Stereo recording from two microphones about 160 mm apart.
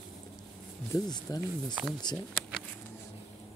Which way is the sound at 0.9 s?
25° left (ahead or behind).